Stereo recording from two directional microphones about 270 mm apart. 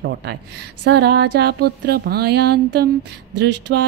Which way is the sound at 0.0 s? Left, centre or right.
Right.